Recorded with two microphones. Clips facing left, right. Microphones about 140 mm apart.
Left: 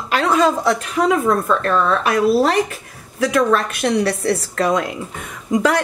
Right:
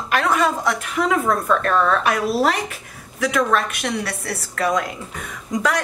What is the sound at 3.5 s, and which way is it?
A woman's voice, 30° left (ahead or behind).